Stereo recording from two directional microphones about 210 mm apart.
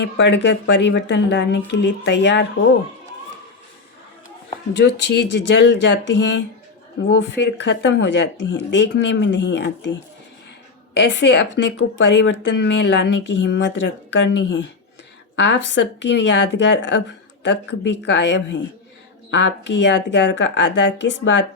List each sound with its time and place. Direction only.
0.0 s speech: 55° left (ahead or behind)
4.8 s speech: 55° left (ahead or behind)